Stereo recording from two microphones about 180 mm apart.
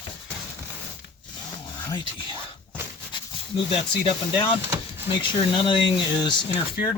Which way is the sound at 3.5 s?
30° left (ahead or behind).